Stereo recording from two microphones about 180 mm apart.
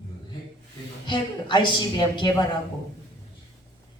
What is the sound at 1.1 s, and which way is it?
Speech, 25° left (ahead or behind).